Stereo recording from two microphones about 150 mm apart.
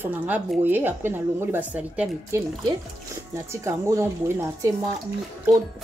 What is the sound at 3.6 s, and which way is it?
A woman's voice, 20° right (ahead or behind).